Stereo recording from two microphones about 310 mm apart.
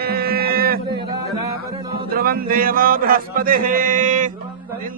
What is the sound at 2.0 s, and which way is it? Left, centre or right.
Music, right.